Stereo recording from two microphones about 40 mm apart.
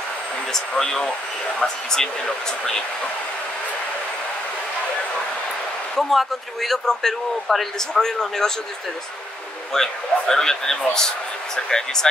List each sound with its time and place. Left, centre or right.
0.5 s speech: centre
5.9 s a man's voice: centre
9.8 s speech: centre